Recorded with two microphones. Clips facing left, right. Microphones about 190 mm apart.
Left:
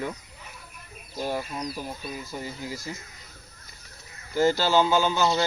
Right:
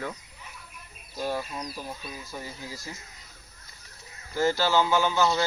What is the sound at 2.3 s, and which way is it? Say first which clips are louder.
Speech: left 3 dB; 20° left (ahead or behind).